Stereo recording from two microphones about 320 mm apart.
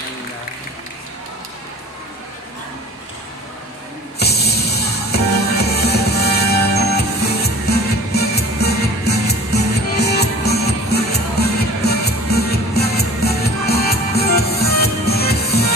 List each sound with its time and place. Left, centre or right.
4.2 s music: left
10.5 s music: centre
11.0 s music: left